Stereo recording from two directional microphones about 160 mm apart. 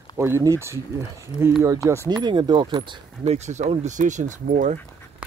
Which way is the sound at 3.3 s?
45° right (ahead or behind).